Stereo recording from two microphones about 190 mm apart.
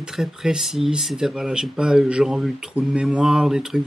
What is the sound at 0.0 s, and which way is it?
Speech, centre (ahead or behind).